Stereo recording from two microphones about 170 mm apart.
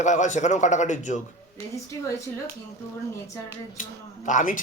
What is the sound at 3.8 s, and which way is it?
Speech, 50° left (ahead or behind).